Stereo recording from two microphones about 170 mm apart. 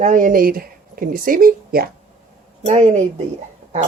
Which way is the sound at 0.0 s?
50° right (ahead or behind).